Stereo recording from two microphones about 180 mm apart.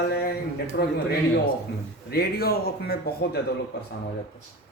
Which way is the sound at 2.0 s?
60° left (ahead or behind).